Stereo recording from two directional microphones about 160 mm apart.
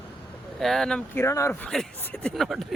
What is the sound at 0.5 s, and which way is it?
Speech, centre (ahead or behind).